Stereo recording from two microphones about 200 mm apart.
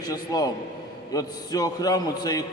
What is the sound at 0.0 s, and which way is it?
A man's voice, 20° left (ahead or behind).